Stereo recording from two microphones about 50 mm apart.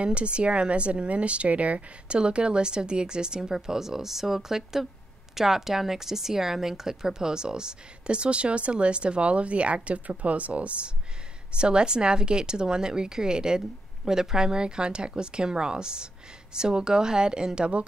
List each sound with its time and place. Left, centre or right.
0.0 s a woman's voice: right